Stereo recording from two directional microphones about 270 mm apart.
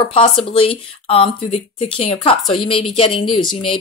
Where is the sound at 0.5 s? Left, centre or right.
Centre.